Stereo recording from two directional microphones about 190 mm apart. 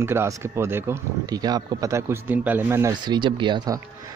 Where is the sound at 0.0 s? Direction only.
15° right (ahead or behind).